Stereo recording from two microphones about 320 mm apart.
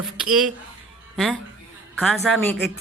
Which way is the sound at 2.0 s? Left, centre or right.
Centre.